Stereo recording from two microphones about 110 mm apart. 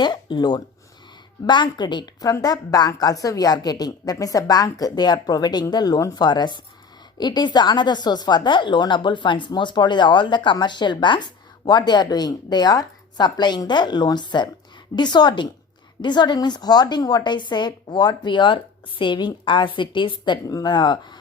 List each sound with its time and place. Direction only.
0.0 s a woman's voice: 45° left (ahead or behind)
2.3 s a woman's voice: 35° left (ahead or behind)